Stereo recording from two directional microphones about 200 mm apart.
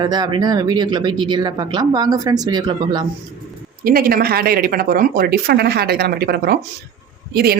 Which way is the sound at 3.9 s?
45° right (ahead or behind).